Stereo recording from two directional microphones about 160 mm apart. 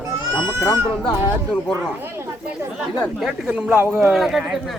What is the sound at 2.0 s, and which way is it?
Speech, 15° right (ahead or behind).